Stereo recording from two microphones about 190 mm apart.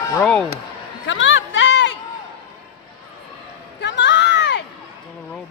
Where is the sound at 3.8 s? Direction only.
65° left (ahead or behind).